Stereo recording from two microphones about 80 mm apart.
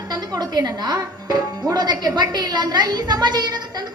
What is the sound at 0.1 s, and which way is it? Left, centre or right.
Speech, right.